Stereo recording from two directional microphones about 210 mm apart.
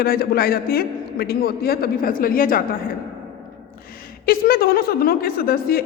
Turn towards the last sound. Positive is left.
turn(degrees=45)  # may be behind; listen again after turning